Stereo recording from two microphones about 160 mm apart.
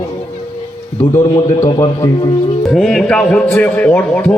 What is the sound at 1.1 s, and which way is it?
Speech, 25° left (ahead or behind).